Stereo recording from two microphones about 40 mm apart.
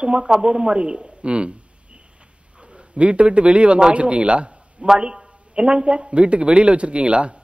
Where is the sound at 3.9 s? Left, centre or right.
Right.